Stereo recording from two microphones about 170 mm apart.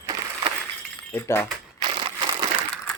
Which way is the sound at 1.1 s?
15° left (ahead or behind).